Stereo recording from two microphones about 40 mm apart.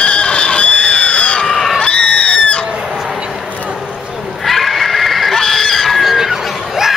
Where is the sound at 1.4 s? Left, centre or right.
Centre.